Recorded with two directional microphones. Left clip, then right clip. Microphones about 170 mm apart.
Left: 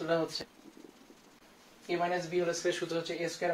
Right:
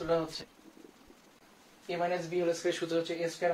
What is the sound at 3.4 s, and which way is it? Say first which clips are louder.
Speech: right 2 dB; 10° right (ahead or behind).